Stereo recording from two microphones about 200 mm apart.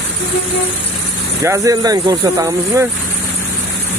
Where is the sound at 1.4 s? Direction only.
15° right (ahead or behind).